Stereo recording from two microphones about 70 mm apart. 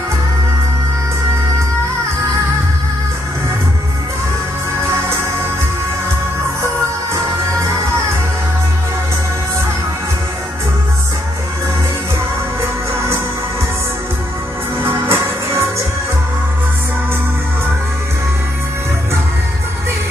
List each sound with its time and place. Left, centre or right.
14.8 s music: right